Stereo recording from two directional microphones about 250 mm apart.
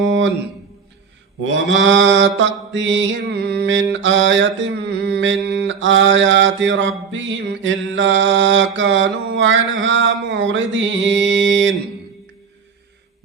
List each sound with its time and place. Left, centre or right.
0.0 s a sound: right
1.4 s mantra: right
11.0 s music: right